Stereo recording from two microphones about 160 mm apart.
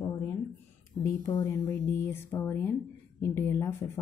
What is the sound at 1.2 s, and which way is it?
Speech, 15° left (ahead or behind).